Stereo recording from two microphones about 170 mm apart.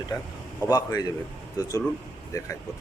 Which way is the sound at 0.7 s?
20° left (ahead or behind).